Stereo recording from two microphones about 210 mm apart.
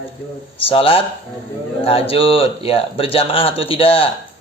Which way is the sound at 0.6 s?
25° left (ahead or behind).